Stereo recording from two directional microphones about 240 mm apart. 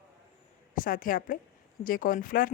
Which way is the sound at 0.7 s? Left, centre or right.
Left.